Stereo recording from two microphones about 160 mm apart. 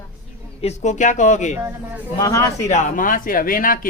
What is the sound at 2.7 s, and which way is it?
Speech, 55° left (ahead or behind).